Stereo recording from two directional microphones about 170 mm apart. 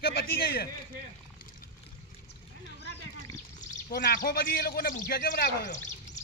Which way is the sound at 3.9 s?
65° left (ahead or behind).